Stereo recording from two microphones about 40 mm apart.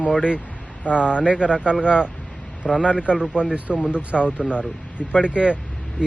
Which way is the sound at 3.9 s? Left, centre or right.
Right.